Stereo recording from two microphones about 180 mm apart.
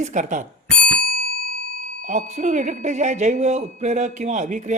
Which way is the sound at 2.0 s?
45° right (ahead or behind).